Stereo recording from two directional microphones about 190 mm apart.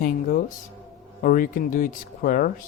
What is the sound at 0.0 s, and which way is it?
Speech, 50° left (ahead or behind).